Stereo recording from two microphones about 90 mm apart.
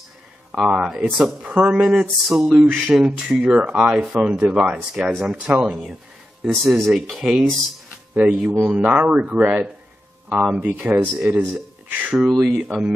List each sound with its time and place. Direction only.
0.5 s speech: 10° right (ahead or behind)
2.5 s speech: 20° right (ahead or behind)
2.8 s speech: 5° right (ahead or behind)